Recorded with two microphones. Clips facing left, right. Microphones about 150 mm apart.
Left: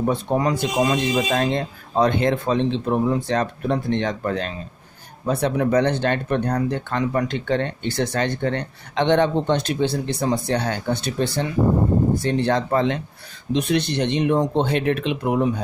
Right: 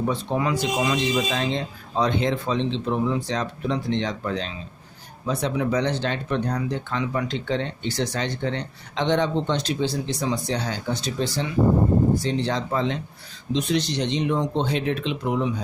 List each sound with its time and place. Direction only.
0.0 s speech: 45° left (ahead or behind)